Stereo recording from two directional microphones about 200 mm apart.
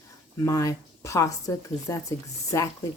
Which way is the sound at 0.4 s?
15° left (ahead or behind).